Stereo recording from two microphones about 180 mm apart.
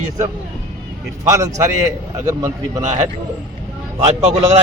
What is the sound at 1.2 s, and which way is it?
A man's voice, 15° right (ahead or behind).